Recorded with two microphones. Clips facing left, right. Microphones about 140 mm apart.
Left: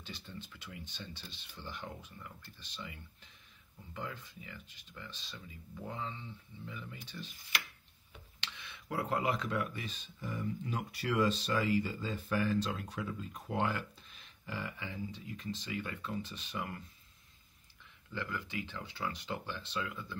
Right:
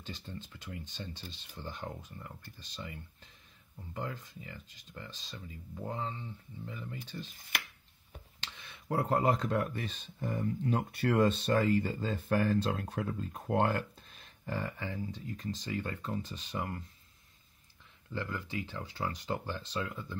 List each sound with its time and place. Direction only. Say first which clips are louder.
0.0 s speech: right 3 dB; 45° right (ahead or behind)
8.1 s a sound: right 1 dB; 40° right (ahead or behind)
8.9 s speech: right 5 dB; 45° right (ahead or behind)
18.1 s speech: right 2 dB; 35° right (ahead or behind)